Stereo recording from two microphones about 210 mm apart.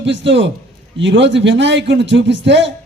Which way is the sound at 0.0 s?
60° right (ahead or behind).